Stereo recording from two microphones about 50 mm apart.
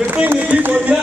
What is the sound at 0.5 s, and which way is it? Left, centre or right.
Speech, right.